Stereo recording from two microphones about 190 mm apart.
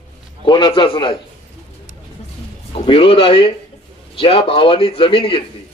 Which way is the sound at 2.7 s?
30° left (ahead or behind).